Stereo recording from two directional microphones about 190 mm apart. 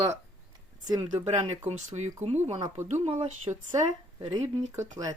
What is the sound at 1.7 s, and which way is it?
Speech, 40° right (ahead or behind).